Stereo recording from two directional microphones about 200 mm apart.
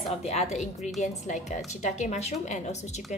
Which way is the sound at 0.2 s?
35° left (ahead or behind).